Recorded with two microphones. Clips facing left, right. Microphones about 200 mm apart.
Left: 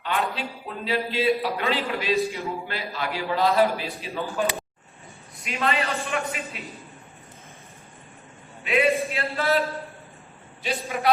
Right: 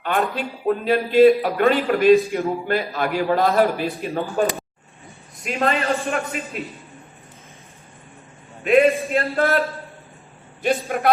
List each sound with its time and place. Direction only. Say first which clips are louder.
0.0 s a man's voice: right 5 dB; 50° right (ahead or behind)
9.1 s a man's voice: right 5 dB; 50° right (ahead or behind)